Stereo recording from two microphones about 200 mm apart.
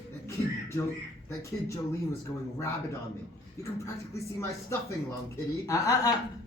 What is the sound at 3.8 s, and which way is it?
Speech, 15° left (ahead or behind).